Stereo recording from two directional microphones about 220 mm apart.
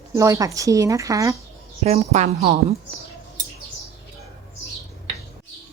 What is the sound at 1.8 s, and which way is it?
Speech, 30° right (ahead or behind).